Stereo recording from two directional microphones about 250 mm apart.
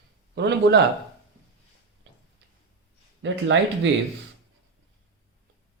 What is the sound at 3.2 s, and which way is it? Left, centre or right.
Speech, right.